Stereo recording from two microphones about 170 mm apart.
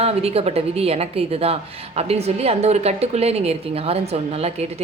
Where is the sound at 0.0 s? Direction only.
35° right (ahead or behind).